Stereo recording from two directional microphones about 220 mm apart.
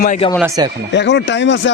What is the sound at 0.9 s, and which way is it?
Speech, 50° left (ahead or behind).